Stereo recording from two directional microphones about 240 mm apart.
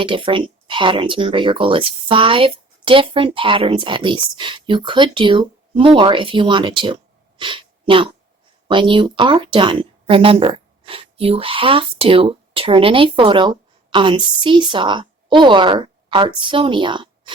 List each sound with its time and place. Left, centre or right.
0.0 s a woman's voice: right